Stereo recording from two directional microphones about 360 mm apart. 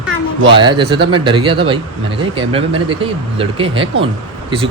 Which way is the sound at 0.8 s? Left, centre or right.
Right.